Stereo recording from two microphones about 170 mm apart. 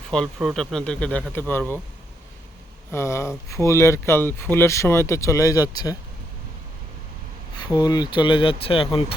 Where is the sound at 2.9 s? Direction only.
15° left (ahead or behind).